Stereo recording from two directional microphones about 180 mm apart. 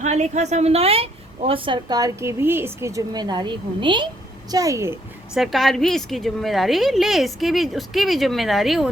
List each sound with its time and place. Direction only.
0.0 s a woman's voice: 40° right (ahead or behind); by 4.9 s 15° right (ahead or behind)
5.3 s a woman's voice: centre (ahead or behind)